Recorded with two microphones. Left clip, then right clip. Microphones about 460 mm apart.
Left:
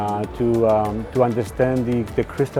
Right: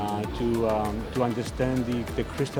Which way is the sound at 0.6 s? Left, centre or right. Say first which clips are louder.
Left 8 dB; left.